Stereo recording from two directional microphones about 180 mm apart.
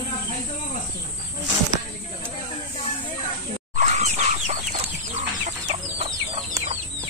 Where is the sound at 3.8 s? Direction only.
40° right (ahead or behind).